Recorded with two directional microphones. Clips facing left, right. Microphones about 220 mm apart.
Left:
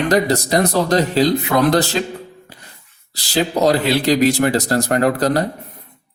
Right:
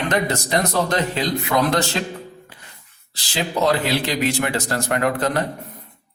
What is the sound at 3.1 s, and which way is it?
A man's voice, 40° left (ahead or behind).